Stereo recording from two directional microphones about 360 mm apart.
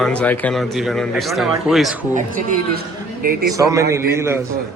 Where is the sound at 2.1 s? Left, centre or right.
Right.